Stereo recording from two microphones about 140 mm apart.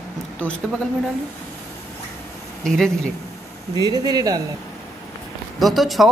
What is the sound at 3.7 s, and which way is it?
Speech, 30° right (ahead or behind).